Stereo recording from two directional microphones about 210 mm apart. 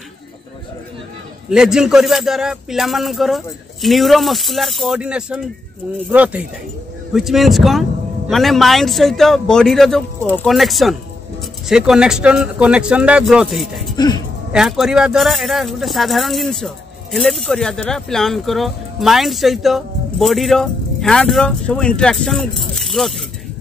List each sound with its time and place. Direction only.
1.5 s speech: 5° right (ahead or behind)
13.9 s speech: 20° left (ahead or behind)
14.5 s speech: centre (ahead or behind)